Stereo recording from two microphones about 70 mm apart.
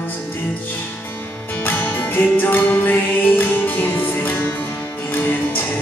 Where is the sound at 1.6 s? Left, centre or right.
Left.